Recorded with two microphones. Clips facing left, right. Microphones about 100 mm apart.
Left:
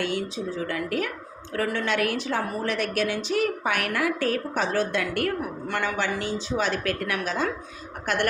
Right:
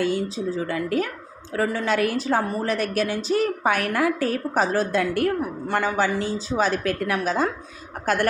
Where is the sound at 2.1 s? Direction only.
35° right (ahead or behind).